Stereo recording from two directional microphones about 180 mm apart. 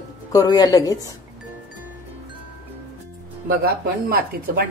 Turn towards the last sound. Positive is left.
turn(degrees=-60)  # may be behind; listen again after turning